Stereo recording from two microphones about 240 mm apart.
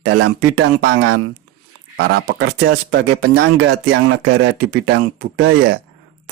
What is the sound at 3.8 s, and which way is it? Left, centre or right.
Speech, right.